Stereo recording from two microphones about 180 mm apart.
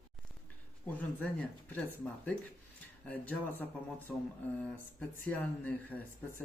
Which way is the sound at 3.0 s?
10° left (ahead or behind).